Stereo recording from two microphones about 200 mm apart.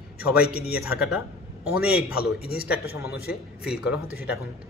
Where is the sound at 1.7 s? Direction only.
5° right (ahead or behind).